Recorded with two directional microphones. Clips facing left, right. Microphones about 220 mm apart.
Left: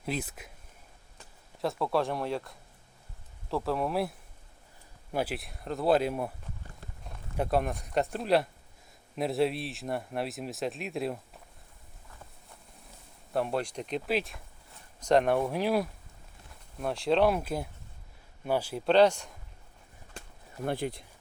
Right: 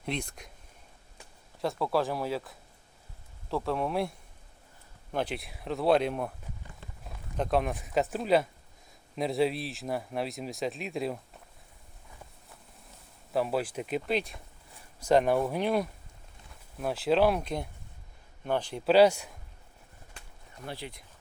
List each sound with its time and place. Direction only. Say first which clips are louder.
0.0 s speech: left 1 dB; 5° left (ahead or behind)
1.6 s speech: even; centre (ahead or behind)
5.1 s speech: even; 5° left (ahead or behind)
7.3 s speech: even; 5° left (ahead or behind)
13.3 s speech: right 1 dB; 5° right (ahead or behind)
18.9 s speech: right 1 dB; 10° right (ahead or behind)
20.7 s speech: left 9 dB; 50° left (ahead or behind)